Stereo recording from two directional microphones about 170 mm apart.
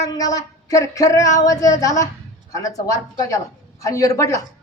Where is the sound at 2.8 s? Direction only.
20° left (ahead or behind).